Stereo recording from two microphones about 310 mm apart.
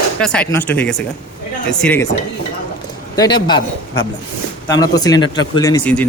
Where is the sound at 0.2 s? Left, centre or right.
Centre.